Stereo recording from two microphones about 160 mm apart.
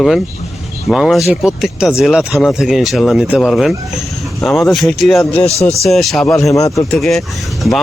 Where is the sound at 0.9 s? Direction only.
Centre (ahead or behind).